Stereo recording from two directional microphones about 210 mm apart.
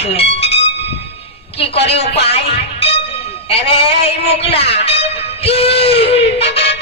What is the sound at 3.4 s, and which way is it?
Speech, 25° left (ahead or behind).